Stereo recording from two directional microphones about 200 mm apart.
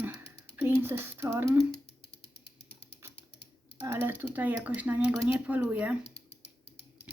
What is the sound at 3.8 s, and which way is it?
Speech, 10° right (ahead or behind).